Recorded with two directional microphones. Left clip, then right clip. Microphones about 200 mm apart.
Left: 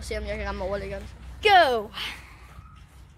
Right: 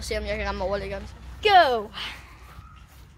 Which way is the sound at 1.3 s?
30° left (ahead or behind).